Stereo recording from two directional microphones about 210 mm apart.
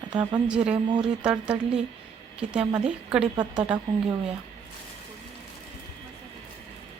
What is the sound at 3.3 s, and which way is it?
Speech, 20° right (ahead or behind).